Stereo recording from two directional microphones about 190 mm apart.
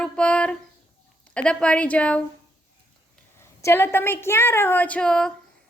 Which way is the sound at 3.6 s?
15° left (ahead or behind).